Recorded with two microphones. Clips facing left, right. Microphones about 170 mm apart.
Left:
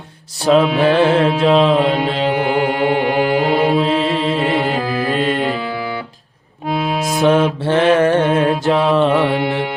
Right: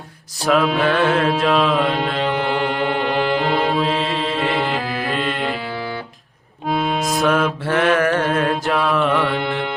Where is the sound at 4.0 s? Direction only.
40° left (ahead or behind).